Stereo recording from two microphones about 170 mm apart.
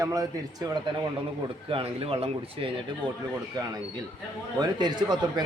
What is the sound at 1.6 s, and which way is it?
Speech, 35° right (ahead or behind).